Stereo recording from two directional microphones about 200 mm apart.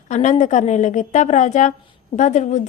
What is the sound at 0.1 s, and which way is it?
A woman's voice, 35° left (ahead or behind).